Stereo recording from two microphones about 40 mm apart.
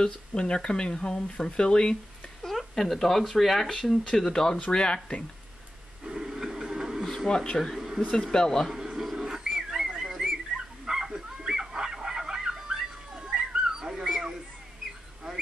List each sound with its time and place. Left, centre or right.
0.0 s speech: centre
2.4 s speech: centre
6.0 s a sound: centre
7.2 s speech: centre
7.5 s speech: centre
7.8 s a sound: centre
8.1 s speech: centre
8.7 s television: centre
9.1 s a sound: centre
10.2 s dog: centre